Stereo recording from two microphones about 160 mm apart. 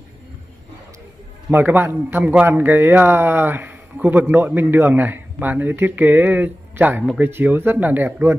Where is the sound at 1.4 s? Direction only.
10° right (ahead or behind).